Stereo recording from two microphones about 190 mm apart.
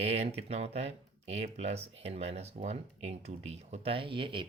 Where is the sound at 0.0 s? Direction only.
35° right (ahead or behind).